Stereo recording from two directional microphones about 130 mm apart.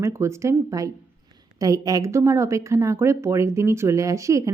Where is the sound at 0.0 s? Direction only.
20° right (ahead or behind).